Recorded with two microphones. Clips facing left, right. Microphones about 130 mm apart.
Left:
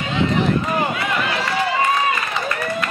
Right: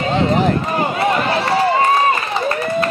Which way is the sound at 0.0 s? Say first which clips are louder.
Right 4 dB; 40° right (ahead or behind).